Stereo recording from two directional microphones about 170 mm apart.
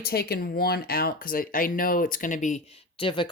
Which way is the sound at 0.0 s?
65° left (ahead or behind).